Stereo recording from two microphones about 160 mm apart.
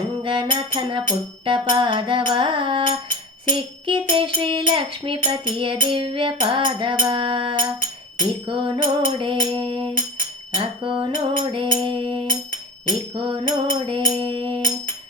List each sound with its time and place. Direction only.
0.3 s music: 30° right (ahead or behind)